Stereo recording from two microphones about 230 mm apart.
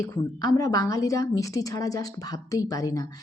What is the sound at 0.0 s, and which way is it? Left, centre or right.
A woman's voice, centre.